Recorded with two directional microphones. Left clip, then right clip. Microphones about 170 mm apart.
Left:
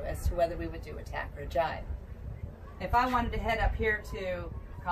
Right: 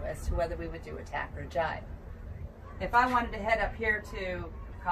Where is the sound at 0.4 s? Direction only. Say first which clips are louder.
Left 4 dB; 25° left (ahead or behind).